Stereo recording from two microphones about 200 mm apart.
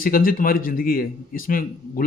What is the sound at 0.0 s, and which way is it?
A man's voice, 45° left (ahead or behind).